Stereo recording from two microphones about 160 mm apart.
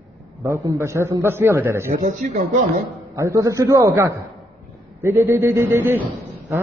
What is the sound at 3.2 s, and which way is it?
A man's voice, 20° right (ahead or behind).